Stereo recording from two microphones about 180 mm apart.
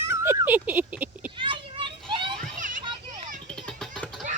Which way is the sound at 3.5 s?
5° left (ahead or behind).